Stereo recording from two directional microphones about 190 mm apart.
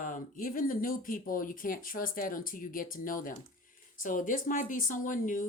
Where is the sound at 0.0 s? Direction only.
45° left (ahead or behind).